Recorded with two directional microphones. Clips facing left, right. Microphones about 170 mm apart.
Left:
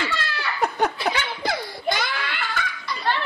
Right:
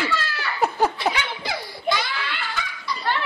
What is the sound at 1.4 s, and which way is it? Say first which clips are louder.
Belly laugh: left 3 dB; 50° left (ahead or behind).